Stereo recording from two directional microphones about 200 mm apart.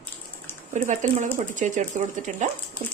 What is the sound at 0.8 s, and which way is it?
A woman's voice, 40° right (ahead or behind).